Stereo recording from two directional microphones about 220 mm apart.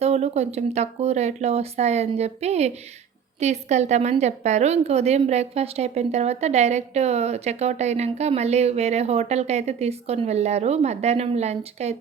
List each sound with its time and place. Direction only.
0.0 s a woman's voice: 30° right (ahead or behind)